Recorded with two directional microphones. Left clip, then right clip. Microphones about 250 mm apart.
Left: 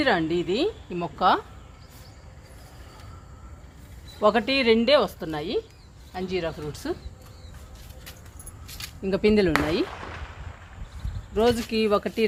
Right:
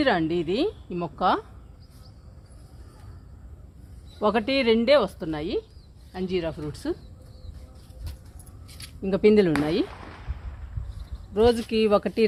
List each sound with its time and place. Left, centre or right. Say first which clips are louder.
0.0 s speech: even; right
4.2 s speech: left 2 dB; right
9.0 s speech: right 2 dB; right
11.3 s speech: right 2 dB; right